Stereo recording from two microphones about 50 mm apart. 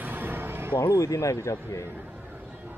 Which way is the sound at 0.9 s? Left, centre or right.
Left.